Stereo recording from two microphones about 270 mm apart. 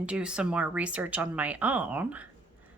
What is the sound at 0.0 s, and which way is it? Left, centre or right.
Speech, centre.